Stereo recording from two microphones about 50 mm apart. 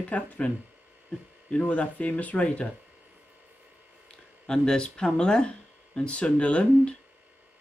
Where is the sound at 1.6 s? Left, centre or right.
Left.